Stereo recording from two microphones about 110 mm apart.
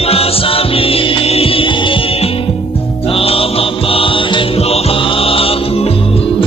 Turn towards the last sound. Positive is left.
turn(degrees=60)  # may be behind; listen again after turning